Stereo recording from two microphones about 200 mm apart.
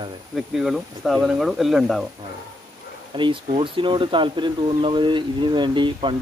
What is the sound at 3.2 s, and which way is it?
Speech, 25° right (ahead or behind).